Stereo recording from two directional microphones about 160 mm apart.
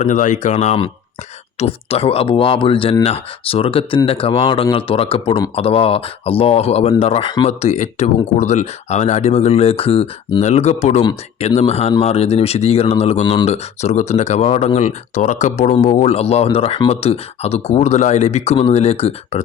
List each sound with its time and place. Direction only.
0.0 s speech: 50° left (ahead or behind); by 7.5 s 35° left (ahead or behind)
7.6 s speech: 45° left (ahead or behind)